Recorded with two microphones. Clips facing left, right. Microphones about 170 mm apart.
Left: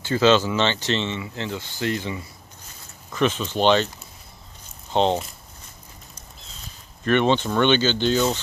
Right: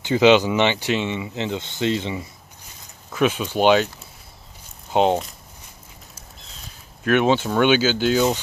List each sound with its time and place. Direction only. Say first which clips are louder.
0.0 s speech: right 3 dB; 15° right (ahead or behind)
3.1 s speech: right 2 dB; 10° right (ahead or behind)
4.9 s speech: right 2 dB; 10° right (ahead or behind)
7.1 s speech: right 1 dB; 5° right (ahead or behind)